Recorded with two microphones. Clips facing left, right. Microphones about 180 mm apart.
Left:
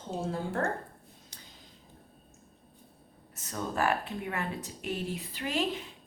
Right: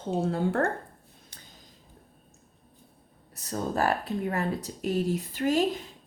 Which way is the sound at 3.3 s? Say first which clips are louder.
Right 4 dB; 35° right (ahead or behind).